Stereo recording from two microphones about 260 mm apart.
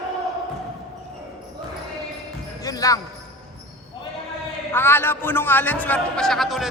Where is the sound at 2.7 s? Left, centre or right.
Centre.